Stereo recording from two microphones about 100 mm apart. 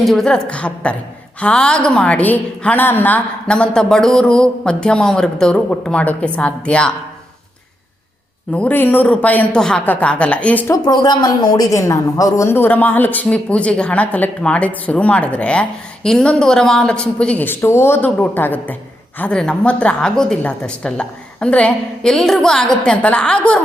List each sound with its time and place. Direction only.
0.0 s a woman's voice: 5° left (ahead or behind)
8.5 s a woman's voice: 15° left (ahead or behind)
9.6 s a woman's voice: 5° left (ahead or behind)
10.8 s a woman's voice: 45° left (ahead or behind)
12.5 s a woman's voice: 20° left (ahead or behind)